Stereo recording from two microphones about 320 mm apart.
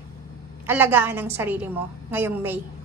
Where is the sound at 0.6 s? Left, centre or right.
Centre.